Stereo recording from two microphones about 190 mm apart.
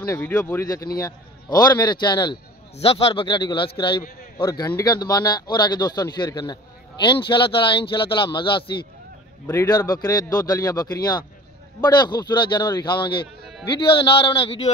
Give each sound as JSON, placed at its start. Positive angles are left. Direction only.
{"t": 0.1, "sound": "a man's voice", "side_deg": 15}